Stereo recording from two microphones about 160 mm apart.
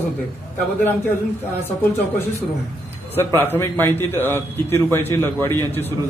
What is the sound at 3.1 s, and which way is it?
A man's voice, 15° left (ahead or behind).